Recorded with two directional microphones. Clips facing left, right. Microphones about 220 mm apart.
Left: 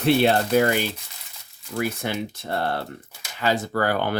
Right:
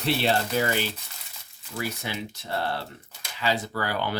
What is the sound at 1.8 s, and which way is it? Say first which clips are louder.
Speech: left 6 dB; 50° left (ahead or behind).